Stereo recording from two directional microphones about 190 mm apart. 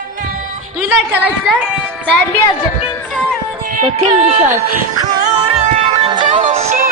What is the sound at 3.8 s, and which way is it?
Music, 35° right (ahead or behind).